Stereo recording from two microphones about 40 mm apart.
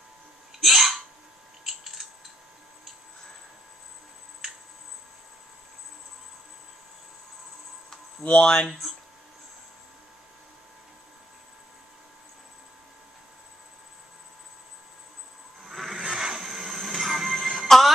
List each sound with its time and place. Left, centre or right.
0.5 s hiccup: centre
1.6 s a sound: centre
8.2 s speech: left
8.6 s speech: centre
15.6 s a sound: centre
16.1 s wood: centre
16.4 s music: centre